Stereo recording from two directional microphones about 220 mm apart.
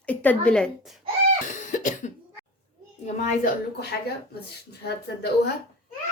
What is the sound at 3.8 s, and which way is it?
Speech, 50° left (ahead or behind).